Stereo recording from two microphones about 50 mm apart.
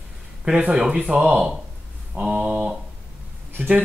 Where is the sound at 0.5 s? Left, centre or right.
Right.